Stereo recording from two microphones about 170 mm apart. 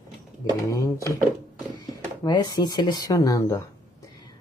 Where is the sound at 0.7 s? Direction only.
20° left (ahead or behind).